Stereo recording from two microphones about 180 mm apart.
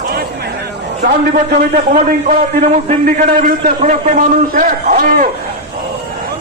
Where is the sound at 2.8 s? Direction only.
45° right (ahead or behind).